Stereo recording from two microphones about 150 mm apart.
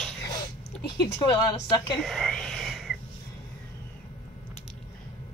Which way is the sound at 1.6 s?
Centre (ahead or behind).